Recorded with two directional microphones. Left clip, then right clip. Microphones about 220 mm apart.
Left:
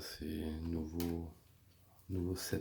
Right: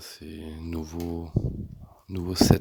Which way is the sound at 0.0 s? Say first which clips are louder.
Right 3 dB; 20° right (ahead or behind).